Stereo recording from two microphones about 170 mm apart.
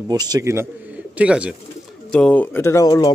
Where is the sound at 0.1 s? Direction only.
20° right (ahead or behind).